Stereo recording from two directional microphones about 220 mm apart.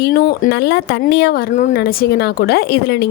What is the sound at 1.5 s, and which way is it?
Speech, 40° left (ahead or behind).